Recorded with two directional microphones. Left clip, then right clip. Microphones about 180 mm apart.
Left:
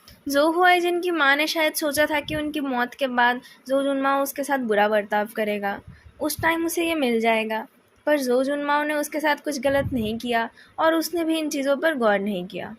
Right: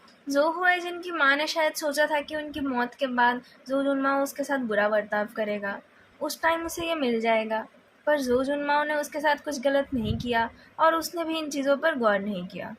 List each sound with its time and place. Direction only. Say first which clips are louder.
0.3 s a woman's voice: left 5 dB; 50° left (ahead or behind)